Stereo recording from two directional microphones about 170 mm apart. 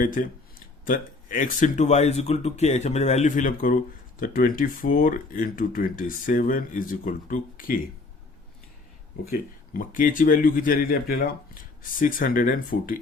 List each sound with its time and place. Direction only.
0.0 s speech: 55° left (ahead or behind)
9.3 s speech: 55° left (ahead or behind)